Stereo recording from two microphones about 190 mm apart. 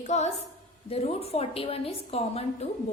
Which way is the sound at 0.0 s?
35° left (ahead or behind).